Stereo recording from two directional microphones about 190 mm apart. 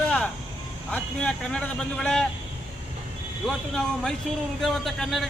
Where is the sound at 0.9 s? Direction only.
5° left (ahead or behind).